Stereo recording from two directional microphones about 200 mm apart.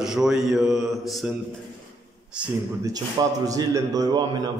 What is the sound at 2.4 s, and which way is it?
Speech, 5° right (ahead or behind).